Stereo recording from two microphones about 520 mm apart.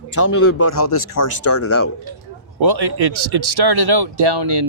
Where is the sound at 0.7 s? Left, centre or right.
Left.